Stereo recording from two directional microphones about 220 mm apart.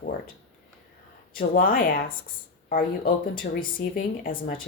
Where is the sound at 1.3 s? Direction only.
40° left (ahead or behind).